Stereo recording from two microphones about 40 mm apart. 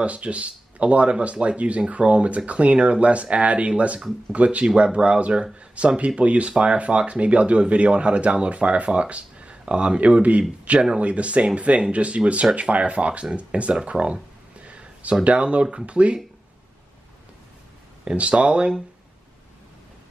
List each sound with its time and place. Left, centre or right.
0.0 s speech: right
14.6 s a sound: right
15.2 s speech: right
18.0 s speech: right